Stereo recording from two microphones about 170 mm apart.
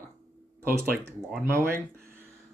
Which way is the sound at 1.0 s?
15° right (ahead or behind).